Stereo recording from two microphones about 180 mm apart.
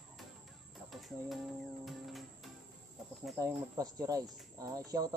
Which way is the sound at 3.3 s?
20° right (ahead or behind).